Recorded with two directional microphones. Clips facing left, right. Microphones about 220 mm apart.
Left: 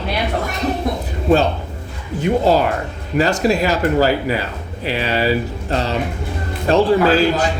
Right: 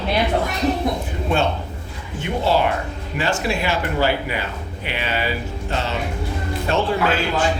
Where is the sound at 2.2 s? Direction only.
40° left (ahead or behind).